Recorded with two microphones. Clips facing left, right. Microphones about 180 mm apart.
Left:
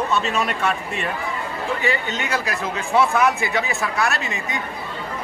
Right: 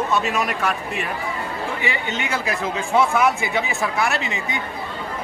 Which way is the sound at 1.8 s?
15° right (ahead or behind).